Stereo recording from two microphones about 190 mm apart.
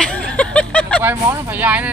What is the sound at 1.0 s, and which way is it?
Speech, 10° right (ahead or behind).